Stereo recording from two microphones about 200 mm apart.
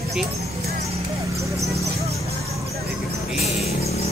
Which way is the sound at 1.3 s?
15° right (ahead or behind).